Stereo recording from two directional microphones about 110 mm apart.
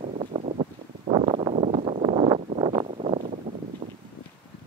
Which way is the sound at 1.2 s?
55° right (ahead or behind).